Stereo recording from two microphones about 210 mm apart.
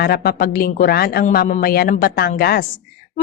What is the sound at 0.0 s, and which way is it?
A woman's voice, 45° left (ahead or behind).